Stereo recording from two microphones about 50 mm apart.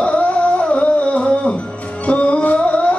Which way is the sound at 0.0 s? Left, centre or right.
Left.